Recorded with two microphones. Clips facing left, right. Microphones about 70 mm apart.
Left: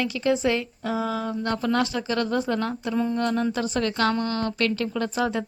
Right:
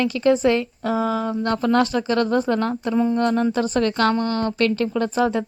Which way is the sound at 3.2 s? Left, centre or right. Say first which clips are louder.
Right 5 dB; right.